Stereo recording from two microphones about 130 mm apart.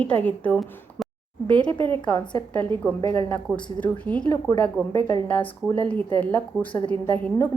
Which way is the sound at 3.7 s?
10° left (ahead or behind).